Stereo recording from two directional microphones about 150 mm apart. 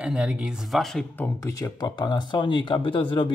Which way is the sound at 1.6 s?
30° left (ahead or behind).